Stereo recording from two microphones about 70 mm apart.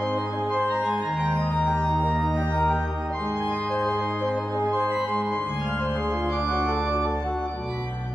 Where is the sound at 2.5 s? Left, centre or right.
Centre.